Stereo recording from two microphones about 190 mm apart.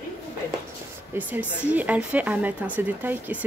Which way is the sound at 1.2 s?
10° right (ahead or behind).